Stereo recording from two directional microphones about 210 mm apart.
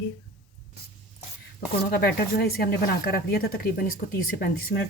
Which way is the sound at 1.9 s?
50° left (ahead or behind).